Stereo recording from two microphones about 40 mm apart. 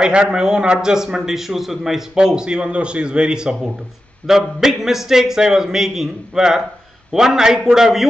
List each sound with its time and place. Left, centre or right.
0.0 s a man's voice: right
2.1 s a man's voice: centre
4.6 s a man's voice: centre